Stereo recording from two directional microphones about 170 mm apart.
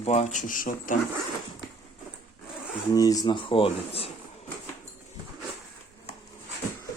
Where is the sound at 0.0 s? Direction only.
40° left (ahead or behind).